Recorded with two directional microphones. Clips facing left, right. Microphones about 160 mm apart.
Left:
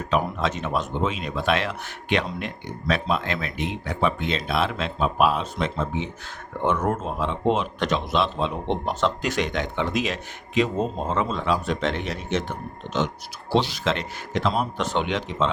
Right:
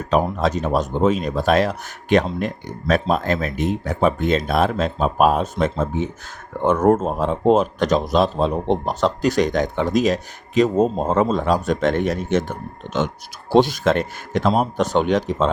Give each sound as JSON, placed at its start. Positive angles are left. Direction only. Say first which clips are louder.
{"t": 0.1, "sound": "speech", "louder": "right 6 dB", "side_deg": -40}